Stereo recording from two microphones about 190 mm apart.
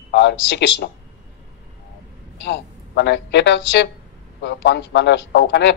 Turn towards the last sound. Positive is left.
turn(degrees=65)  # may be behind; listen again after turning